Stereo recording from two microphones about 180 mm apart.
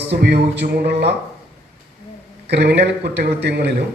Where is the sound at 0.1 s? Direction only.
65° right (ahead or behind).